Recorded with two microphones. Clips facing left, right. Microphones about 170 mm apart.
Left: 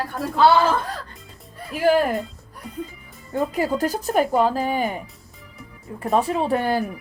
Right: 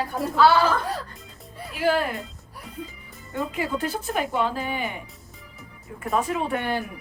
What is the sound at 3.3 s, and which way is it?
Speech, 40° left (ahead or behind).